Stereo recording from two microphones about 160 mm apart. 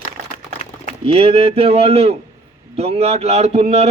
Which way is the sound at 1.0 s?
35° right (ahead or behind).